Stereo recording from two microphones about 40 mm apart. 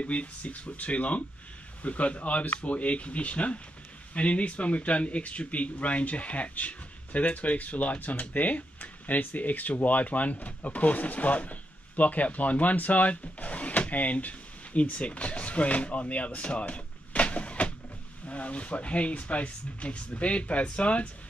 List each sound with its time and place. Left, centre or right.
0.0 s speech: left
16.3 s door: left
18.2 s speech: left